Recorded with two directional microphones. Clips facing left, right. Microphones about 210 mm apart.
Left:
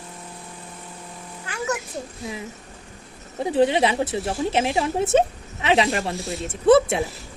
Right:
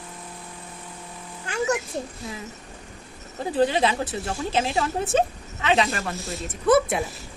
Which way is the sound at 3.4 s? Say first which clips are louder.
Left 3 dB; 25° left (ahead or behind).